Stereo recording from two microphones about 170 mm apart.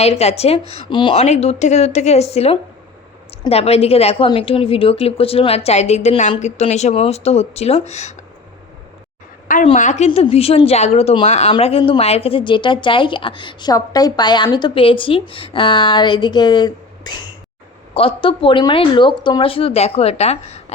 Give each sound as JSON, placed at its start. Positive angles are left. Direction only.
{"t": 0.0, "sound": "a woman's voice", "side_deg": 40}
{"t": 9.7, "sound": "speech", "side_deg": 45}
{"t": 10.1, "sound": "a woman's voice", "side_deg": 35}
{"t": 11.5, "sound": "a woman's voice", "side_deg": 30}